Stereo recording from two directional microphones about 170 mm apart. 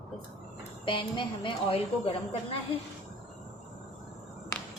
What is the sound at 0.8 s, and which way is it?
A woman's voice, 30° left (ahead or behind).